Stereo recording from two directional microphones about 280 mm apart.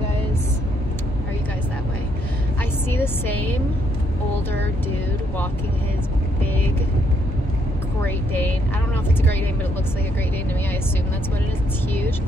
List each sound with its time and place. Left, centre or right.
2.9 s a woman's voice: centre
8.0 s speech: centre